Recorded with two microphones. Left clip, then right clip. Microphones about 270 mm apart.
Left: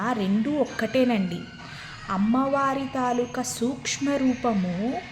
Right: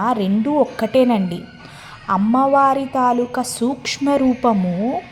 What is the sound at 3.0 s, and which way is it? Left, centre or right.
Music, centre.